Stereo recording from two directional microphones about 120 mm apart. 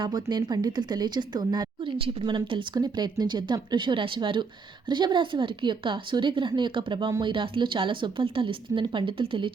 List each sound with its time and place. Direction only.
0.0 s speech: 35° right (ahead or behind)